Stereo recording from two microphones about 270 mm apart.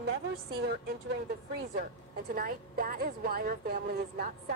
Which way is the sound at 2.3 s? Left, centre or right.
Right.